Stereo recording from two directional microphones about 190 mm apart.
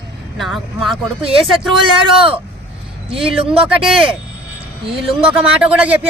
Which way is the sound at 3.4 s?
30° right (ahead or behind).